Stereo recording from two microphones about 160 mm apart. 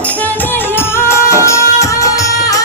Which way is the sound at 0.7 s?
15° left (ahead or behind).